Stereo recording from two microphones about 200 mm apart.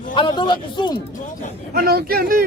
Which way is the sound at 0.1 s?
25° left (ahead or behind).